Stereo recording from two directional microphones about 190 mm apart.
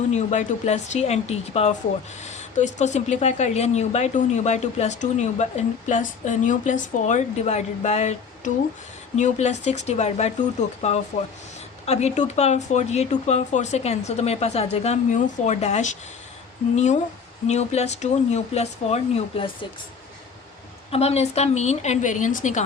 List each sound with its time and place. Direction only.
0.1 s speech: 35° left (ahead or behind)
20.9 s speech: 35° left (ahead or behind)